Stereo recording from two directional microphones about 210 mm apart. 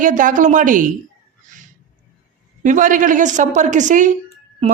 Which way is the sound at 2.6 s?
35° right (ahead or behind).